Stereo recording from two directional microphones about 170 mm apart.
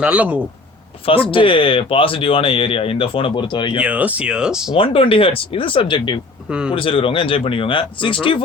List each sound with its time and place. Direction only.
0.0 s speech: 5° right (ahead or behind)
1.3 s speech: 30° left (ahead or behind)
3.8 s speech: 10° right (ahead or behind)
4.7 s speech: 30° left (ahead or behind)
6.5 s speech: 5° right (ahead or behind)
6.7 s speech: 30° left (ahead or behind)